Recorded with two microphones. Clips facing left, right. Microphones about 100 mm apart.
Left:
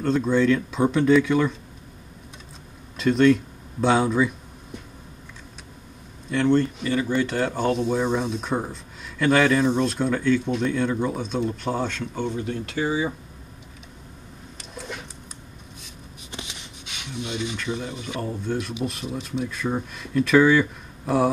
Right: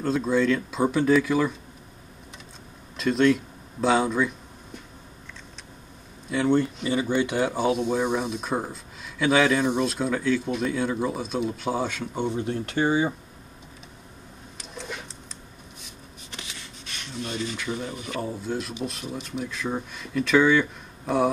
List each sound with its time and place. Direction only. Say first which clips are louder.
0.0 s speech: left 2 dB; centre (ahead or behind)
3.0 s speech: left 3 dB; centre (ahead or behind)
6.3 s speech: left 2 dB; 10° right (ahead or behind); by 13.1 s 30° right (ahead or behind)
14.6 s a sound: left 1 dB; centre (ahead or behind)
16.3 s a sound: left 3 dB; 20° left (ahead or behind)
17.2 s speech: left 1 dB; 20° left (ahead or behind)
18.2 s speech: left 3 dB; 5° right (ahead or behind)